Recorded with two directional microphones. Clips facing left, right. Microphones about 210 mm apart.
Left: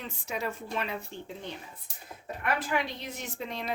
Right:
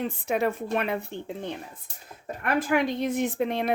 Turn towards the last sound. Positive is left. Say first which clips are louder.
# right 10 dB
turn(degrees=-60)  # may be behind; listen again after turning